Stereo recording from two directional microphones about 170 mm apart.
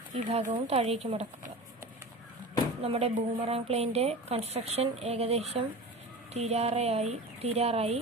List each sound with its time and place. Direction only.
0.3 s a woman's voice: 40° right (ahead or behind)
2.8 s a woman's voice: 35° right (ahead or behind)